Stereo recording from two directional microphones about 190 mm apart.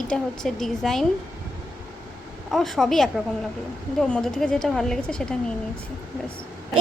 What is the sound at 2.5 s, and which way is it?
A man's voice, centre (ahead or behind).